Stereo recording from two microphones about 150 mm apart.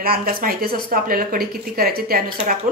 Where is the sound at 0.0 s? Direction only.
75° right (ahead or behind).